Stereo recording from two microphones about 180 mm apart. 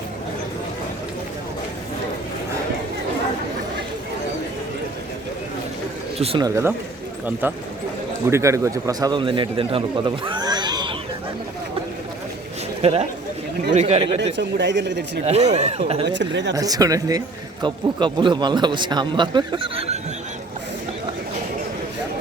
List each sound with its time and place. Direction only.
6.1 s speech: 35° right (ahead or behind)
6.4 s a man's voice: 15° right (ahead or behind)
12.8 s speech: 35° right (ahead or behind)
14.2 s speech: 75° right (ahead or behind)
15.2 s speech: 35° right (ahead or behind)
16.0 s speech: 75° right (ahead or behind)
16.6 s speech: 20° right (ahead or behind)